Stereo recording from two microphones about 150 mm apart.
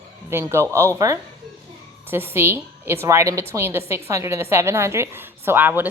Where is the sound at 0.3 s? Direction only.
15° right (ahead or behind).